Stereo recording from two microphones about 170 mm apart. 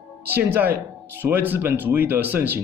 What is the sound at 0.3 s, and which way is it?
Speech, 10° right (ahead or behind).